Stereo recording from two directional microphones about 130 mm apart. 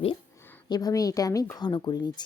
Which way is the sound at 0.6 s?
30° left (ahead or behind).